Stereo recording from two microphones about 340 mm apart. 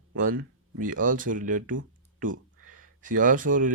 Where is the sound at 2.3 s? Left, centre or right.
Right.